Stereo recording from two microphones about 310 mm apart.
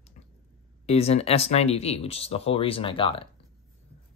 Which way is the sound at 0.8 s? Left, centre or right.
Centre.